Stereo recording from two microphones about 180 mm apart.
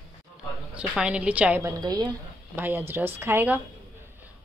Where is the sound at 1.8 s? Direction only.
20° right (ahead or behind).